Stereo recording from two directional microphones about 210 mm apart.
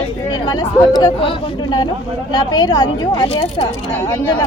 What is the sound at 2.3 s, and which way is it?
Speech, 20° left (ahead or behind).